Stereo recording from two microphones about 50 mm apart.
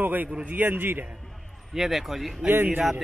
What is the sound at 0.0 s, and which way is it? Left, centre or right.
A man's voice, right.